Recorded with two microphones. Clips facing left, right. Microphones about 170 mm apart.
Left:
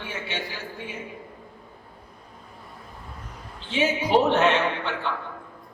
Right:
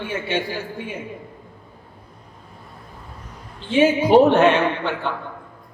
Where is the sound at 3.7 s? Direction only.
55° right (ahead or behind).